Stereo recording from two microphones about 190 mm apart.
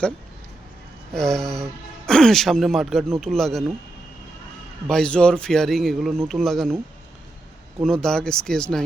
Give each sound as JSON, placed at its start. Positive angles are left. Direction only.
{"t": 1.1, "sound": "speech", "side_deg": 0}
{"t": 4.9, "sound": "speech", "side_deg": 5}
{"t": 7.8, "sound": "speech", "side_deg": 5}